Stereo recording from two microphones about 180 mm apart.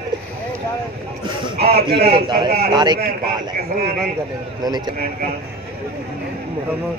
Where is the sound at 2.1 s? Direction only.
25° right (ahead or behind).